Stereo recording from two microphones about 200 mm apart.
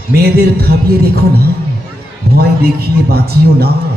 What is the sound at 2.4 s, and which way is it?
A man's voice, 50° right (ahead or behind).